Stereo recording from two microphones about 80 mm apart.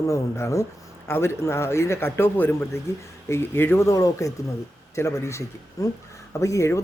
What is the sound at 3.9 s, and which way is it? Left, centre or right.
Speech, left.